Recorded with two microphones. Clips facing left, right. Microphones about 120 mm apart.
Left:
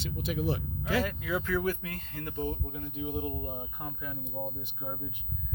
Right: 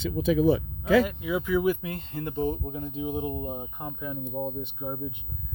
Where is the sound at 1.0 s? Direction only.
15° right (ahead or behind).